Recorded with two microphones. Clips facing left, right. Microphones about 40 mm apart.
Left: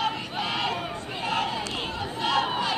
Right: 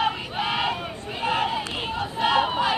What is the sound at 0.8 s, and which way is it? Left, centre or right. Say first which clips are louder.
Chatter: right 2 dB; centre.